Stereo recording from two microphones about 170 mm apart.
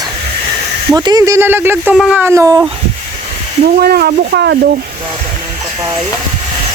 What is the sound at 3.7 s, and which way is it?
Speech, 65° right (ahead or behind).